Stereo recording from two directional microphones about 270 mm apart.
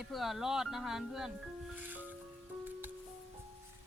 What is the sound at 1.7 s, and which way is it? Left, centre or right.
Music, centre.